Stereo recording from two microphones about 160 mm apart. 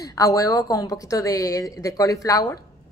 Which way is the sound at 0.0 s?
20° left (ahead or behind).